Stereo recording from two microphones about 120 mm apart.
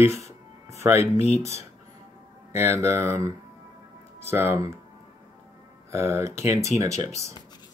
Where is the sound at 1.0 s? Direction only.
60° left (ahead or behind).